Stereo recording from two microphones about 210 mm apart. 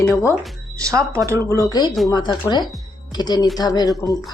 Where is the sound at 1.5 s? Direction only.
15° left (ahead or behind).